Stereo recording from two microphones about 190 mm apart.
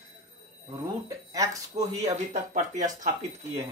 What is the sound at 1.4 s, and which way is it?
Speech, 20° right (ahead or behind).